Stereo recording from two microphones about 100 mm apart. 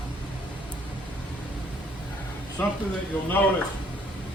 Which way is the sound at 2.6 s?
20° left (ahead or behind).